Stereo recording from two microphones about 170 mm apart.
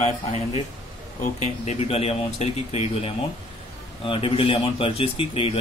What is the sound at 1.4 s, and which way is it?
Speech, 40° left (ahead or behind).